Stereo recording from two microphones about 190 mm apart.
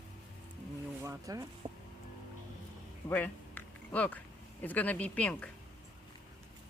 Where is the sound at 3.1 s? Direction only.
10° left (ahead or behind).